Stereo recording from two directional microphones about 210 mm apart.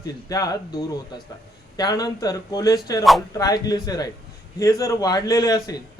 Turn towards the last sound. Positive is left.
turn(degrees=15)  # may be behind; listen again after turning